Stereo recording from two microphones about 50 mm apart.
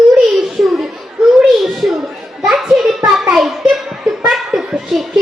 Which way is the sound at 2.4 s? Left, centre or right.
Centre.